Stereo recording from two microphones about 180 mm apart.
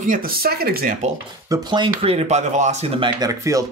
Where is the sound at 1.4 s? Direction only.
20° right (ahead or behind).